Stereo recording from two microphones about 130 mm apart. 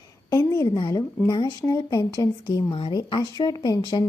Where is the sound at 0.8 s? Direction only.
40° left (ahead or behind).